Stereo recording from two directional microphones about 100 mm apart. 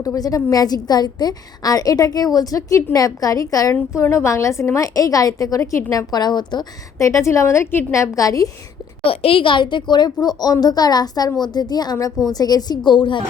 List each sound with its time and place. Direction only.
0.0 s a woman's voice: 35° left (ahead or behind)
7.0 s a woman's voice: 30° left (ahead or behind)
9.0 s speech: 65° left (ahead or behind)